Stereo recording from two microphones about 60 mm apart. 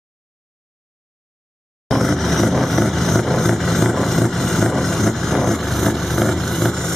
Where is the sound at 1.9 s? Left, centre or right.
Centre.